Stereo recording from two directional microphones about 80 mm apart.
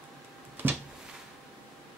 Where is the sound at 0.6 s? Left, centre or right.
Right.